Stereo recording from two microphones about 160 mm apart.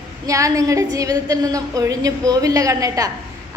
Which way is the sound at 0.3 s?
20° right (ahead or behind).